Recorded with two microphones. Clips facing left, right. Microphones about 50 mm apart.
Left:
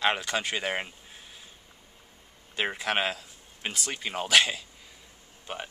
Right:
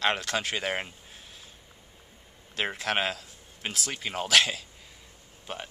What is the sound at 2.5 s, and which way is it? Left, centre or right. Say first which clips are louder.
Speech: left 1 dB; centre.